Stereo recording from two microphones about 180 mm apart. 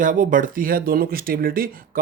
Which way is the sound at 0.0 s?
45° right (ahead or behind).